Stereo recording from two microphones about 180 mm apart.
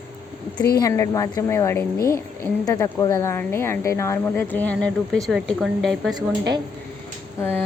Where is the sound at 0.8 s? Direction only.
15° left (ahead or behind); by 6.1 s centre (ahead or behind).